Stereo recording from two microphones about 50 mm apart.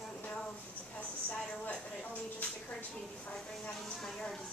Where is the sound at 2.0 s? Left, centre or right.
Left.